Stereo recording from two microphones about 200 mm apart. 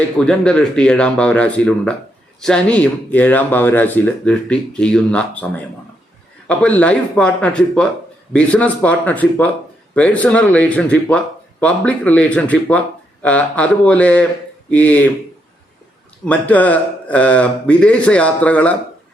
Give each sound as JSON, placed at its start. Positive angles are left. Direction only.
{"t": 0.2, "sound": "speech", "side_deg": 5}
{"t": 16.2, "sound": "speech", "side_deg": 5}